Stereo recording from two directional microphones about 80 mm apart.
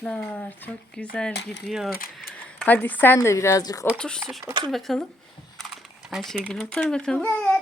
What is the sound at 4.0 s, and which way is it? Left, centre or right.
Speech, centre.